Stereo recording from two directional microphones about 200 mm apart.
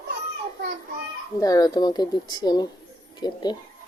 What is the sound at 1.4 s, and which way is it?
Speech, 20° left (ahead or behind).